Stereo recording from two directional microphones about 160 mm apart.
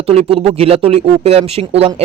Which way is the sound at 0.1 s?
35° right (ahead or behind).